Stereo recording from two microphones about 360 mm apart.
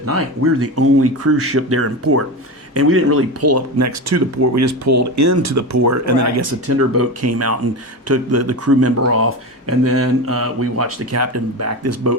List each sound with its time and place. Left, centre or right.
0.6 s speech: right